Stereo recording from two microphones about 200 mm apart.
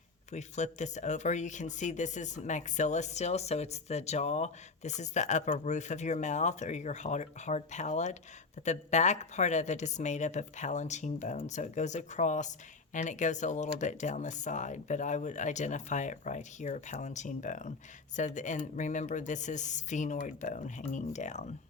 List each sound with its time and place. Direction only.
0.3 s a woman's voice: 35° left (ahead or behind)